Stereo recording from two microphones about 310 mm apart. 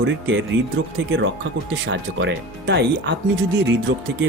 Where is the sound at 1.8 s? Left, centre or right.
Right.